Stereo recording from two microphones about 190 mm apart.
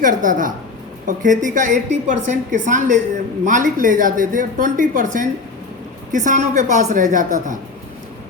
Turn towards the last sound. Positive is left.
turn(degrees=-40)  # may be behind; listen again after turning